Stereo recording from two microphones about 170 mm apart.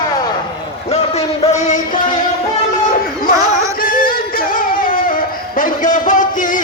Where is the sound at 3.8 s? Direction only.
55° left (ahead or behind).